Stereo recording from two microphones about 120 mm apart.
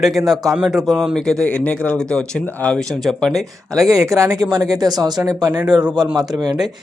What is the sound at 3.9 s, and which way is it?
A man's voice, 25° right (ahead or behind).